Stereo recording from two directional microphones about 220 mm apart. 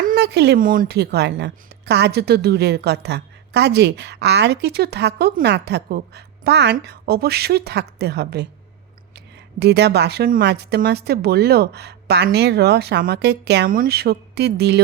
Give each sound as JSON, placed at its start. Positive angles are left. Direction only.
{"t": 0.0, "sound": "speech", "side_deg": -45}
{"t": 9.6, "sound": "speech", "side_deg": -50}